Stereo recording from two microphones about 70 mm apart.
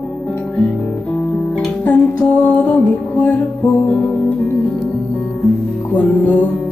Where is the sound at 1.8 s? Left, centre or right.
Left.